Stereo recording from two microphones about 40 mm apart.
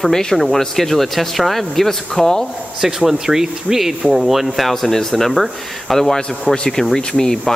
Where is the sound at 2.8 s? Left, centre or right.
Centre.